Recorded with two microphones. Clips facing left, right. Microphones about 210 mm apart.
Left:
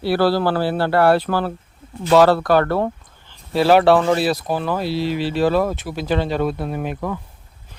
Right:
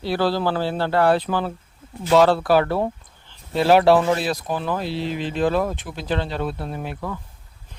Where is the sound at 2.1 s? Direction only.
65° left (ahead or behind).